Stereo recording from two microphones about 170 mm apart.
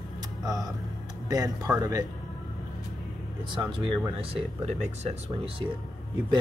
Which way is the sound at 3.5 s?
30° right (ahead or behind).